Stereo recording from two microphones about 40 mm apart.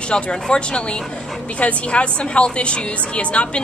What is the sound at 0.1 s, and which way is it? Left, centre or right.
A woman's voice, left.